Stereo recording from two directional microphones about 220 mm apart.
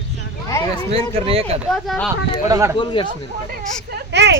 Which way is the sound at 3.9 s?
50° right (ahead or behind).